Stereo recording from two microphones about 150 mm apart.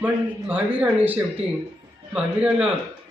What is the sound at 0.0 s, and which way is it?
Speech, 10° right (ahead or behind).